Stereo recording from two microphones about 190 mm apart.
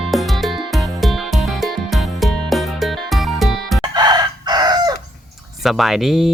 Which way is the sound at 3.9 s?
20° right (ahead or behind).